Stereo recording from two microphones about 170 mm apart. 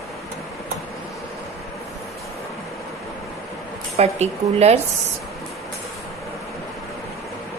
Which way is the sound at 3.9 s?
40° right (ahead or behind).